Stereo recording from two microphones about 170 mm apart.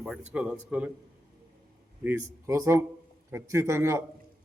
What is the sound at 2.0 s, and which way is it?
A man's voice, 15° right (ahead or behind).